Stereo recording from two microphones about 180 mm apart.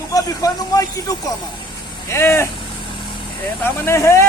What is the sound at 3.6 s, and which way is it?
Speech, 15° left (ahead or behind).